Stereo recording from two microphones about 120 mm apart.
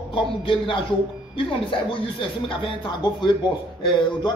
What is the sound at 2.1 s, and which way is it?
A man's voice, 45° left (ahead or behind).